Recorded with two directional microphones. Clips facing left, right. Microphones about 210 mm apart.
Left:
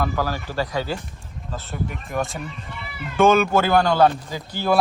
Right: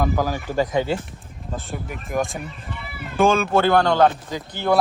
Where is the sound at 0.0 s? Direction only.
15° right (ahead or behind).